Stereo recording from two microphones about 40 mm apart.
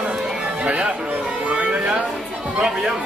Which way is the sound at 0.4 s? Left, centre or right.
Right.